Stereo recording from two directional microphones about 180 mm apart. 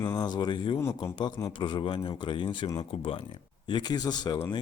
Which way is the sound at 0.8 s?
15° left (ahead or behind).